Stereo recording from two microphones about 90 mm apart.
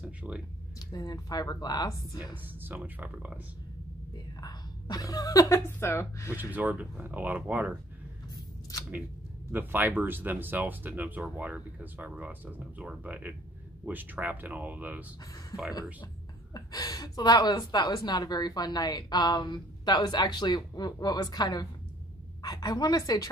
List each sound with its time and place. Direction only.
0.0 s speech: 15° right (ahead or behind)
0.7 s a woman's voice: 50° left (ahead or behind)
2.3 s speech: 20° right (ahead or behind)
4.4 s a woman's voice: 50° left (ahead or behind)
5.8 s a woman's voice: 25° left (ahead or behind)
6.5 s speech: 15° right (ahead or behind)
9.5 s speech: 20° right (ahead or behind)
16.5 s a woman's voice: 45° left (ahead or behind)